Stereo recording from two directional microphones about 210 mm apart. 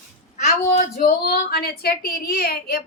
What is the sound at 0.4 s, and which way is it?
Speech, 40° left (ahead or behind).